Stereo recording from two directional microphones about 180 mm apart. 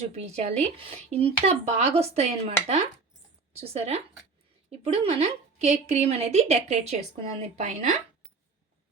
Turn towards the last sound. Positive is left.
turn(degrees=-40)  # may be behind; listen again after turning